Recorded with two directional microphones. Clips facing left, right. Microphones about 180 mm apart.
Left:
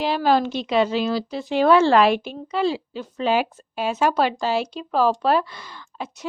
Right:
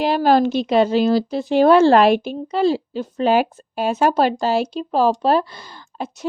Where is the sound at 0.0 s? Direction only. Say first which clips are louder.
Right 4 dB; 50° right (ahead or behind).